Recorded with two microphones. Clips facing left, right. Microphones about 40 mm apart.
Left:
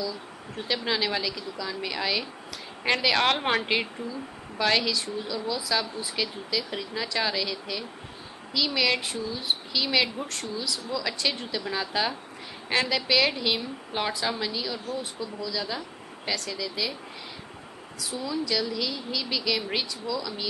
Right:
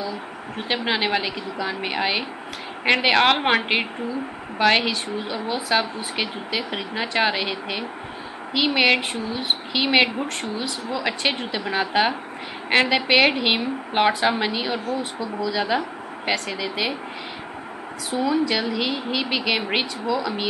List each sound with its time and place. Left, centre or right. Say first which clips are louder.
0.0 s a woman's voice: right 4 dB; right
18.1 s speech: right 7 dB; right